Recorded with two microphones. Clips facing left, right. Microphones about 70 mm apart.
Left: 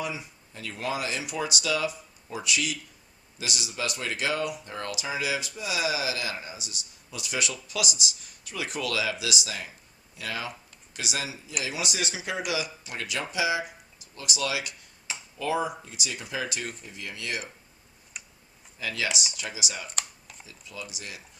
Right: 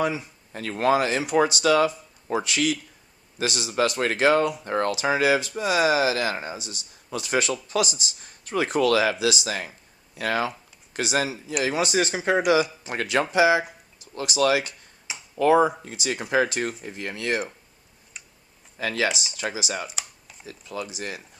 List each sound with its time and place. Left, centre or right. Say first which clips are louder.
0.5 s speech: right 10 dB; right
3.9 s speech: right 9 dB; right
10.9 s speech: right 9 dB; right
18.1 s tick-tock: even; centre
18.8 s speech: right 6 dB; right
19.9 s computer keyboard: left 1 dB; centre
20.4 s speech: right 9 dB; right